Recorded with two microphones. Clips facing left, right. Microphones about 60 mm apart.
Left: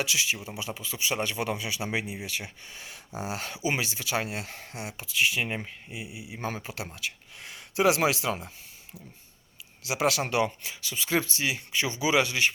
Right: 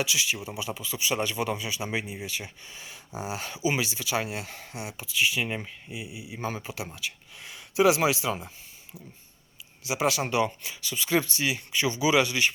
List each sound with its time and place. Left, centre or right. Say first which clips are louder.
0.0 s speech: right 1 dB; left
9.8 s speech: even; left
10.7 s speech: right 2 dB; left